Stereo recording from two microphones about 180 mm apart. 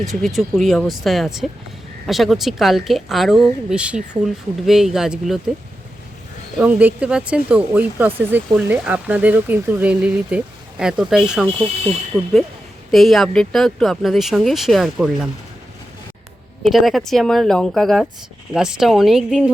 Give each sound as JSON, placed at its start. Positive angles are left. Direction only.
{"t": 0.1, "sound": "speech", "side_deg": 0}
{"t": 6.6, "sound": "speech", "side_deg": -10}
{"t": 12.9, "sound": "speech", "side_deg": 0}
{"t": 16.6, "sound": "speech", "side_deg": 0}